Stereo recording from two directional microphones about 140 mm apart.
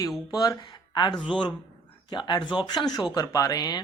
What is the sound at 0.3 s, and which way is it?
Speech, 30° left (ahead or behind).